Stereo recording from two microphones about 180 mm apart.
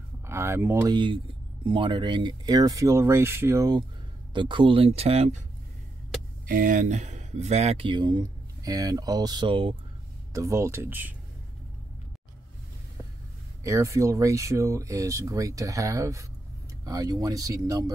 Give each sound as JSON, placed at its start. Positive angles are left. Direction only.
{"t": 0.3, "sound": "speech", "side_deg": -15}
{"t": 0.9, "sound": "speech", "side_deg": -30}
{"t": 6.4, "sound": "speech", "side_deg": -50}
{"t": 10.3, "sound": "speech", "side_deg": -15}
{"t": 13.7, "sound": "speech", "side_deg": -15}